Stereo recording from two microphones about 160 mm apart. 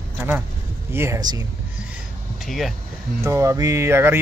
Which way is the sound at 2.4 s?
Centre (ahead or behind).